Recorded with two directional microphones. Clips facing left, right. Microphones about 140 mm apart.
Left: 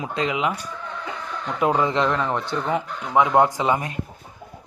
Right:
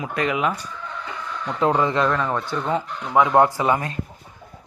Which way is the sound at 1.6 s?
15° left (ahead or behind).